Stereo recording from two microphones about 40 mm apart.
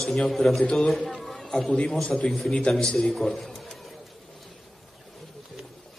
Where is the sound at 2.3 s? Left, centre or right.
Centre.